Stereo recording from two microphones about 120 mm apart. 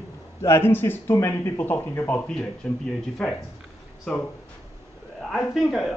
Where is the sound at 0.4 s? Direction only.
20° left (ahead or behind); by 4.2 s 5° left (ahead or behind).